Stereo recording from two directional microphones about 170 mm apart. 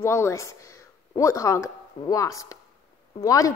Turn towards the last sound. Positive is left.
turn(degrees=20)  # may be behind; listen again after turning